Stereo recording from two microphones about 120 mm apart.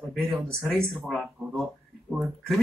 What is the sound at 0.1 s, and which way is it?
Speech, centre (ahead or behind).